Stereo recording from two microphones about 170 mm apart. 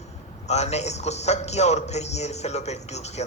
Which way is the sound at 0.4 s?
40° left (ahead or behind).